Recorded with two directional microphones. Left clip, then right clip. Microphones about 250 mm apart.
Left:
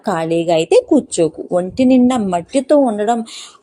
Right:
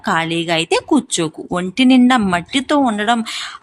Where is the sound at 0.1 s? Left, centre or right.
Centre.